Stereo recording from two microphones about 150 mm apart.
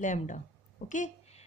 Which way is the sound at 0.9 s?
50° left (ahead or behind).